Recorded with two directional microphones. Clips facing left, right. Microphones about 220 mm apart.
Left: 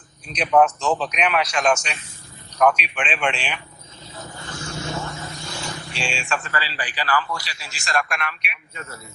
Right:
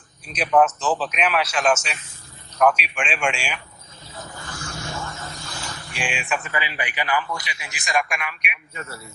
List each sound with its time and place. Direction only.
0.3 s a man's voice: 5° right (ahead or behind)
4.3 s a sound: 20° left (ahead or behind)
5.9 s speech: 15° right (ahead or behind)